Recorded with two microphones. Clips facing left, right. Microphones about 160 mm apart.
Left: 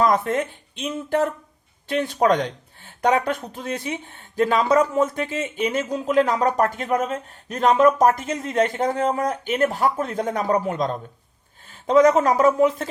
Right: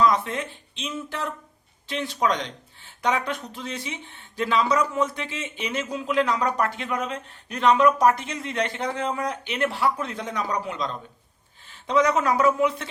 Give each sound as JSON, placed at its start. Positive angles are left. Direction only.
{"t": 0.0, "sound": "a man's voice", "side_deg": 45}